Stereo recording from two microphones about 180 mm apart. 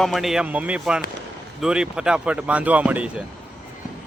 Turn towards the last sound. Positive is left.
turn(degrees=-10)  # may be behind; listen again after turning